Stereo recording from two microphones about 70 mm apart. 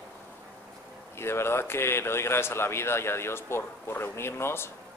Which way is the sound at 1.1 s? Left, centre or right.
Left.